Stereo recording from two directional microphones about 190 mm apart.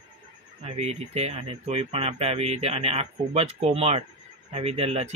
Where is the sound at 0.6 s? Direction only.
35° right (ahead or behind).